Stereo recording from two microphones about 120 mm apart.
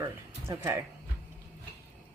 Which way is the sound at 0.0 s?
25° right (ahead or behind).